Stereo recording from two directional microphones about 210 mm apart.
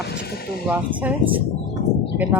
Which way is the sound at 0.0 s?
50° left (ahead or behind).